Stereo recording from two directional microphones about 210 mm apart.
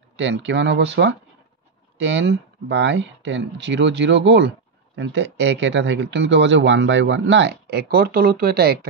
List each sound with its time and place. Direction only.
0.1 s speech: 60° right (ahead or behind)